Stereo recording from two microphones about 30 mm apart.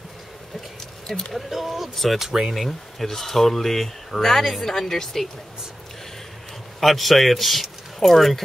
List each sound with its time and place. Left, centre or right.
0.7 s a sound: left
1.5 s speech: centre
2.5 s speech: centre
6.8 s speech: centre